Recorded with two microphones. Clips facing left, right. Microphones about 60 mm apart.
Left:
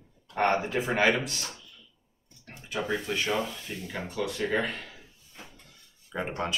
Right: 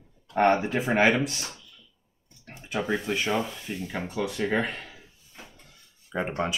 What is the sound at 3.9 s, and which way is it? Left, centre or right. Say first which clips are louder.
Speech: right 1 dB; right.